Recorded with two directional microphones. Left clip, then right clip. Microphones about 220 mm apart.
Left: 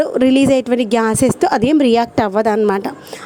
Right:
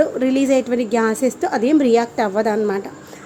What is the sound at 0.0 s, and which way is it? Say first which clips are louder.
A woman's voice: left 4 dB; 40° left (ahead or behind).